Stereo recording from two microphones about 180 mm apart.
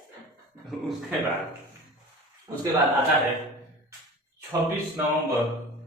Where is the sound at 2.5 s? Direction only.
20° right (ahead or behind).